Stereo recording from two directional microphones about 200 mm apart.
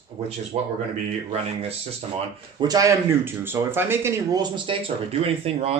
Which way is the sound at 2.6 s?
20° right (ahead or behind).